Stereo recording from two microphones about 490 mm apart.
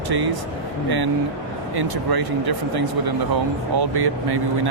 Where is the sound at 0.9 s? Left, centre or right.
Right.